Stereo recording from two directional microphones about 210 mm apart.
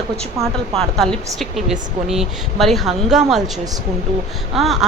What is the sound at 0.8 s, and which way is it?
Speech, centre (ahead or behind).